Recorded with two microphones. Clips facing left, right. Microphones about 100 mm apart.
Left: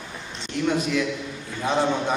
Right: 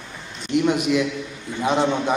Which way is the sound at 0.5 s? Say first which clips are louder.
Right 4 dB; 15° right (ahead or behind).